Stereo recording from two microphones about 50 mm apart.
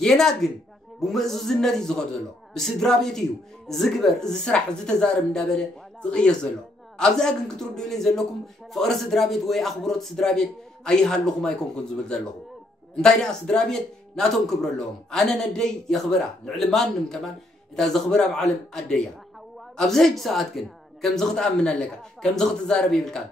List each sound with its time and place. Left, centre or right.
0.0 s a man's voice: centre
6.0 s a man's voice: centre